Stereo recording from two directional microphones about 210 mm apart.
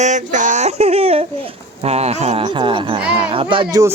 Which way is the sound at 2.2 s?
25° right (ahead or behind).